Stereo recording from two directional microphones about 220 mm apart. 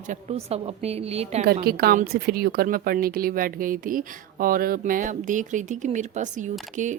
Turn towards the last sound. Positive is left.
turn(degrees=-35)  # may be behind; listen again after turning